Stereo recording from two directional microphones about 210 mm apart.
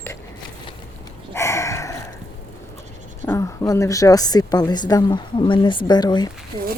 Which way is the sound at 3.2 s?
10° left (ahead or behind).